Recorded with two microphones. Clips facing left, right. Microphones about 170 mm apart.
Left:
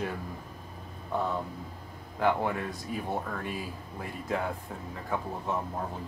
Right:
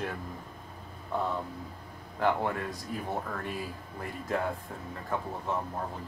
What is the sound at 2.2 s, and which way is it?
Speech, centre (ahead or behind).